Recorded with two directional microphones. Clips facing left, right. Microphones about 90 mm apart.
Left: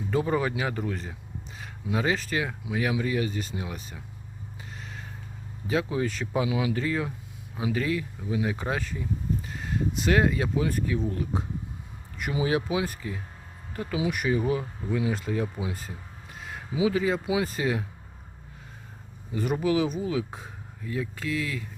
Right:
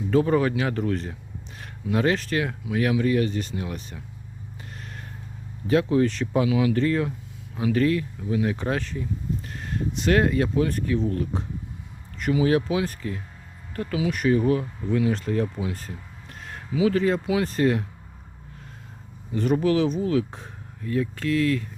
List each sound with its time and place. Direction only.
0.1 s speech: 5° left (ahead or behind)
4.7 s a sound: centre (ahead or behind)
5.6 s speech: 5° left (ahead or behind)
6.5 s speech: 20° left (ahead or behind)
6.7 s speech: 10° left (ahead or behind)
19.3 s speech: 10° left (ahead or behind)